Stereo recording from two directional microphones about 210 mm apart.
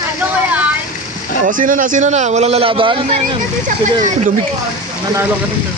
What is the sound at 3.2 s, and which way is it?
A man's voice, 35° right (ahead or behind).